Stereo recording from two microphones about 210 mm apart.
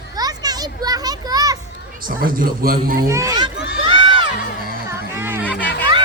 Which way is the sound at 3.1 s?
15° right (ahead or behind).